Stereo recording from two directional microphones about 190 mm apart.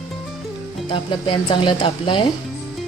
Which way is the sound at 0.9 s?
25° left (ahead or behind).